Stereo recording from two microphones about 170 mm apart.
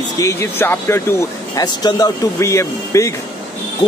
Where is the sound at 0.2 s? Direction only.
15° left (ahead or behind).